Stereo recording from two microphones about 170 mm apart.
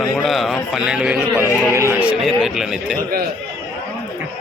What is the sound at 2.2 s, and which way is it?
Speech, centre (ahead or behind).